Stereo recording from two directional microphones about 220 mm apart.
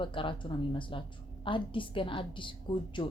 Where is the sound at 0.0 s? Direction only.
25° left (ahead or behind).